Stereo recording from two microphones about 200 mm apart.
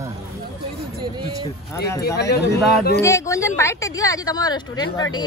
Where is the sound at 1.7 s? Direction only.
15° left (ahead or behind).